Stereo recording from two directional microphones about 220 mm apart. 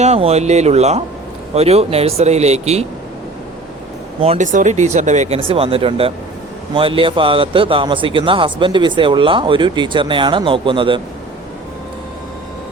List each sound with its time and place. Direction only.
0.0 s speech: 30° right (ahead or behind)
4.2 s speech: 30° right (ahead or behind)